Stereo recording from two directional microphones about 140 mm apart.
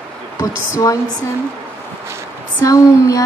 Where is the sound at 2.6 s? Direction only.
25° left (ahead or behind).